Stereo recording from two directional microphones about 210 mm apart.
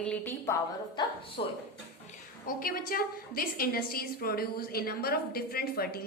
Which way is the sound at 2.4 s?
45° left (ahead or behind).